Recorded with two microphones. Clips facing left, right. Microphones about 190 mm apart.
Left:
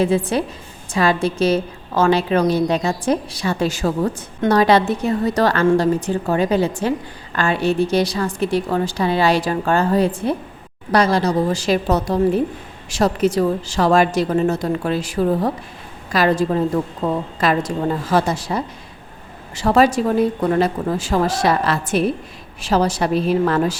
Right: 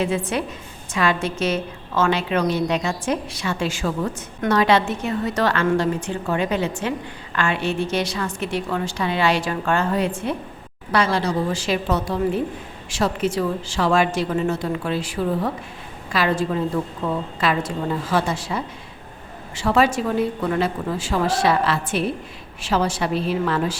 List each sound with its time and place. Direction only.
0.0 s a woman's voice: 35° left (ahead or behind)